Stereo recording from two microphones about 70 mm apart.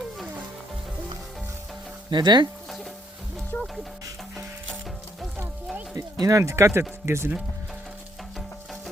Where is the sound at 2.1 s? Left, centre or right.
Right.